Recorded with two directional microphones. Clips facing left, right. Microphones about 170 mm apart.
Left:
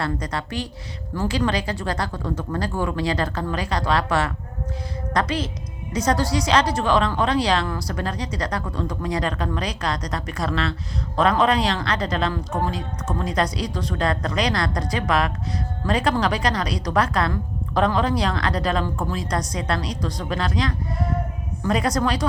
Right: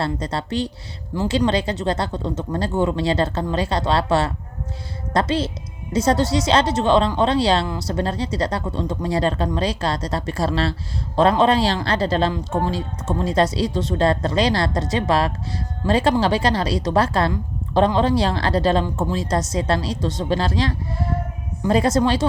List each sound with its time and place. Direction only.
0.0 s speech: 30° right (ahead or behind)